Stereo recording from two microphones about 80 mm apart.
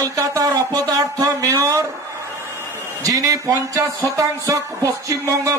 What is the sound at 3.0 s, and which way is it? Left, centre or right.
A man's voice, right.